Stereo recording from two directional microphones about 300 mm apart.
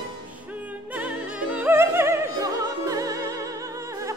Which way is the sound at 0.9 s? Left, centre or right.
Centre.